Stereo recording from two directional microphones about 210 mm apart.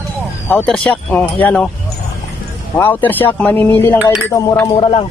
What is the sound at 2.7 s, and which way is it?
Speech, 10° left (ahead or behind).